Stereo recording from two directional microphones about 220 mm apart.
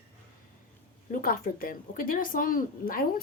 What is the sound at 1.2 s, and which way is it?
Speech, 40° left (ahead or behind).